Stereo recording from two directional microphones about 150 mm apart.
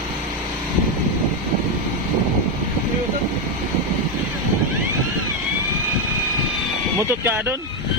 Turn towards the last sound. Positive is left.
turn(degrees=-15)  # may be behind; listen again after turning